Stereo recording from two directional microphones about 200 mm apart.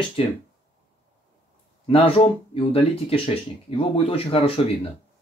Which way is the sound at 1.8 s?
30° left (ahead or behind).